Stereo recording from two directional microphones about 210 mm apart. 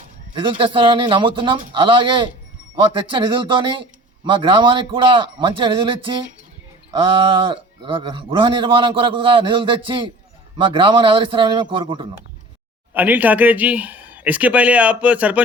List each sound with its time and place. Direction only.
0.3 s a man's voice: 25° right (ahead or behind)
12.9 s speech: 10° right (ahead or behind)